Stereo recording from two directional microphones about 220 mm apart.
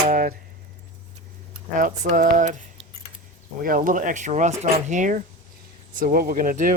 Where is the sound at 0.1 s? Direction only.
40° right (ahead or behind).